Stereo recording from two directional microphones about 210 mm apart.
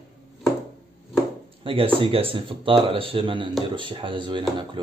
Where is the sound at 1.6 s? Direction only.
25° right (ahead or behind).